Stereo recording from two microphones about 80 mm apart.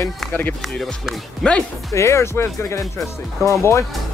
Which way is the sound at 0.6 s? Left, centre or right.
Centre.